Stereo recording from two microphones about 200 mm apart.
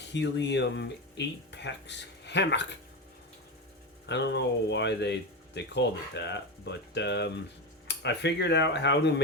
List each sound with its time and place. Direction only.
0.0 s speech: 60° left (ahead or behind)
4.0 s speech: 60° left (ahead or behind)